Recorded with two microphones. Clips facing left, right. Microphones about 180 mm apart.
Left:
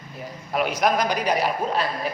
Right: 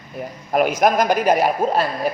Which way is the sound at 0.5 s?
50° right (ahead or behind).